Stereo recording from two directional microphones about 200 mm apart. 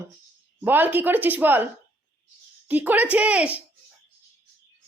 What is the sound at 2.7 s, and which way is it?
Speech, 10° right (ahead or behind).